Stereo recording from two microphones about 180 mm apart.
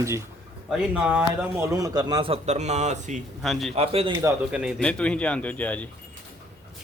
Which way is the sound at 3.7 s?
35° right (ahead or behind).